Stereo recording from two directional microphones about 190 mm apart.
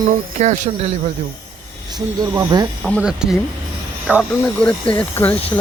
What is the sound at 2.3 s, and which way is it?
Speech, 20° right (ahead or behind).